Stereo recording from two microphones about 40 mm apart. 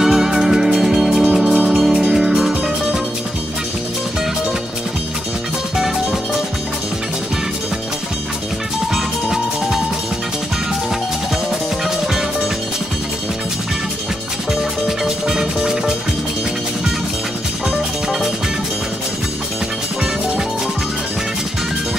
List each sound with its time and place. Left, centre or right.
0.0 s music: centre
1.5 s music: right
2.0 s music: centre
8.9 s music: centre
14.5 s music: centre